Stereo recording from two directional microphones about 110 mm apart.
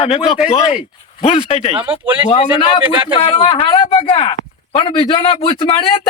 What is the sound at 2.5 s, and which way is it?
A man's voice, 45° left (ahead or behind).